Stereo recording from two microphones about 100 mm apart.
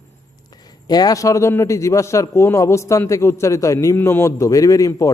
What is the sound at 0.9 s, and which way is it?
A man's voice, 40° left (ahead or behind).